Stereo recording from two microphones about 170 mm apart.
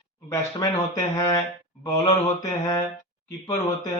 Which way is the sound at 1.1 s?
20° left (ahead or behind).